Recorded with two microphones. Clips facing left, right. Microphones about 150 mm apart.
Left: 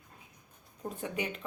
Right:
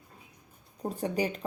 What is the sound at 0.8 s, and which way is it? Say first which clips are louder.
Speech: right 6 dB; 35° right (ahead or behind).